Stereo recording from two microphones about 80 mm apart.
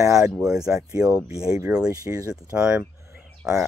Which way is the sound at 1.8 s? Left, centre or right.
Right.